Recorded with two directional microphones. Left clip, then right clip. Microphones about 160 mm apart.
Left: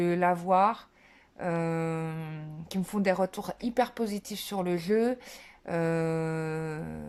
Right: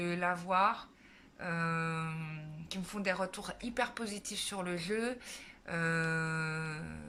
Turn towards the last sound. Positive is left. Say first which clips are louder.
# left 6 dB
turn(degrees=40)  # may be behind; listen again after turning